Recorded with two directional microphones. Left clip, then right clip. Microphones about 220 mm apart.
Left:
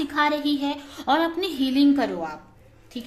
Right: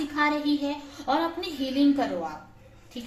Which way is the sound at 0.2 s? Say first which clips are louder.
Left 3 dB; 50° left (ahead or behind).